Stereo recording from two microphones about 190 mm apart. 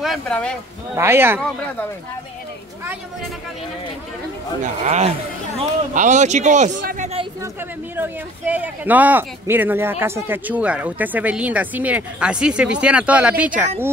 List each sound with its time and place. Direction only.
0.0 s speech: 5° left (ahead or behind)
0.9 s speech: 15° right (ahead or behind)
4.8 s speech: 35° right (ahead or behind)
7.9 s speech: 10° right (ahead or behind)